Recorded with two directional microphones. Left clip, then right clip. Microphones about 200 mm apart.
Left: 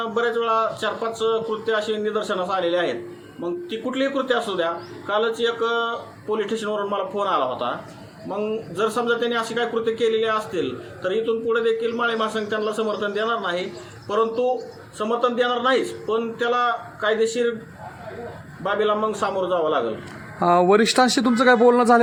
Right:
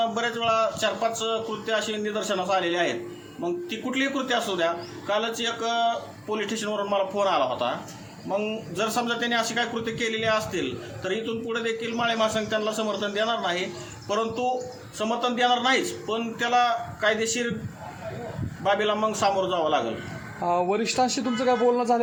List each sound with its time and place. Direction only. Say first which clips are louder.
0.0 s a man's voice: left 3 dB; 5° right (ahead or behind)
18.6 s a man's voice: left 2 dB; centre (ahead or behind)
20.4 s a man's voice: left 8 dB; 50° left (ahead or behind)